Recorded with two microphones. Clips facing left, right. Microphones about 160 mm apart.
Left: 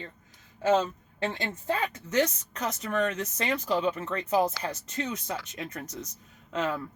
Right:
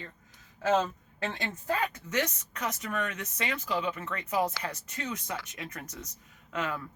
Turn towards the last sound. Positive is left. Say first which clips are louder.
# left 4 dB
turn(degrees=30)  # may be behind; listen again after turning